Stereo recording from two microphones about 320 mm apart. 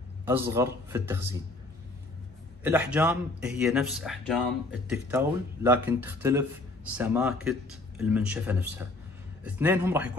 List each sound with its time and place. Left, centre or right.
0.2 s a man's voice: centre
2.6 s a man's voice: centre